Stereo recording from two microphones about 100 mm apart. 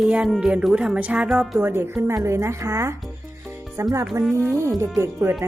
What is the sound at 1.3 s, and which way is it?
Speech, centre (ahead or behind).